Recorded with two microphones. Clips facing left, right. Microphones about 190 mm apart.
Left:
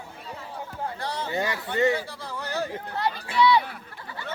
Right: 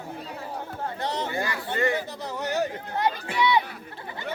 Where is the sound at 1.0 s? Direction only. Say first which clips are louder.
Right 4 dB; 20° right (ahead or behind).